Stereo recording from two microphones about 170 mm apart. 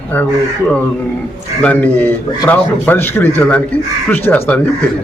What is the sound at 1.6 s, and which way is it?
A man's voice, 10° left (ahead or behind).